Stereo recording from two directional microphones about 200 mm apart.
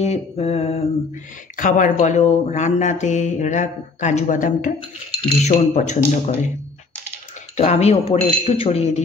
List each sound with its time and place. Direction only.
0.0 s speech: 30° left (ahead or behind)
7.5 s speech: 35° left (ahead or behind)